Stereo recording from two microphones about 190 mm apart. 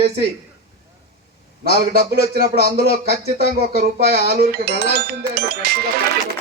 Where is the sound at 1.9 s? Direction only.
55° right (ahead or behind).